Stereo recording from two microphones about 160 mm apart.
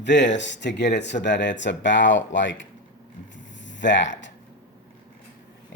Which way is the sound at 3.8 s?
90° left.